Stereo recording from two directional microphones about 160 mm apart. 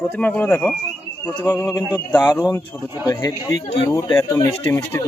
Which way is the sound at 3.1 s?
25° left (ahead or behind).